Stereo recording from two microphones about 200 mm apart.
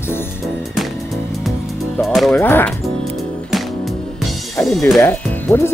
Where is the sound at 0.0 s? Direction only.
10° left (ahead or behind).